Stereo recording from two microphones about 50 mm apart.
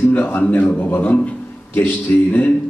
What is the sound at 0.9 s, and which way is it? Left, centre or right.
A man's voice, left.